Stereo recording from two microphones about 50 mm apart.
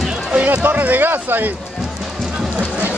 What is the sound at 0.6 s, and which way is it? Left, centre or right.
Speech, right.